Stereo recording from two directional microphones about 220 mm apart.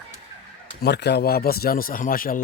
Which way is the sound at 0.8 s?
50° left (ahead or behind).